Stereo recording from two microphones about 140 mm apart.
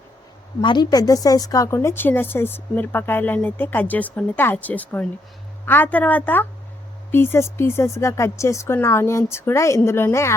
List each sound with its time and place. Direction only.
0.6 s a woman's voice: 30° left (ahead or behind)